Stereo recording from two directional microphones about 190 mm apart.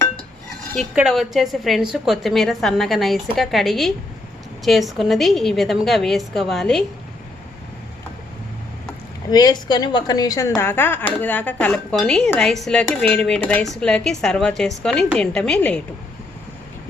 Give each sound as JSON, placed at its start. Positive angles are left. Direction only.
{"t": 0.9, "sound": "speech", "side_deg": 0}
{"t": 9.3, "sound": "a woman's voice", "side_deg": 20}